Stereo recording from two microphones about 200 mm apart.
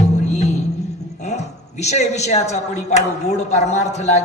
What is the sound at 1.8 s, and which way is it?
A woman's voice, 35° left (ahead or behind).